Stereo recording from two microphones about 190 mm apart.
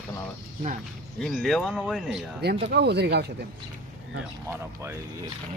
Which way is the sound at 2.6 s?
60° right (ahead or behind).